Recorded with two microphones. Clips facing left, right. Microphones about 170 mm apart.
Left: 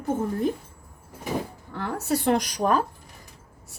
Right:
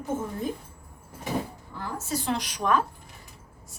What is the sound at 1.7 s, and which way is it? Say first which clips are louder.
A woman's voice: left 6 dB; 70° left (ahead or behind).